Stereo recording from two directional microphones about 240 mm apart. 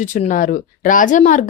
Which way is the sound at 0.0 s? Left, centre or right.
Left.